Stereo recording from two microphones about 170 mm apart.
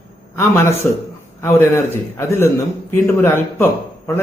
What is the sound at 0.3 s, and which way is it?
A man's voice, 15° left (ahead or behind).